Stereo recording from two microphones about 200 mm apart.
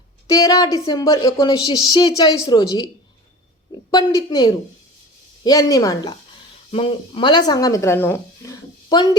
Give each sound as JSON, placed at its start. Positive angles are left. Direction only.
{"t": 0.3, "sound": "a woman's voice", "side_deg": 20}
{"t": 3.9, "sound": "a woman's voice", "side_deg": 20}